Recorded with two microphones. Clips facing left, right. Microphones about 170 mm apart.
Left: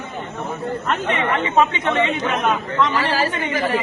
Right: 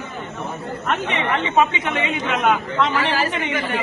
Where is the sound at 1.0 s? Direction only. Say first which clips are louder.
Left 4 dB; 20° right (ahead or behind).